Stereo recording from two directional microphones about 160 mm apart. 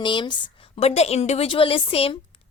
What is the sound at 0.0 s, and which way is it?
A woman's voice, 30° left (ahead or behind).